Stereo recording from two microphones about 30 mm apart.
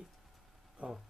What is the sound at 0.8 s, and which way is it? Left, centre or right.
Speech, right.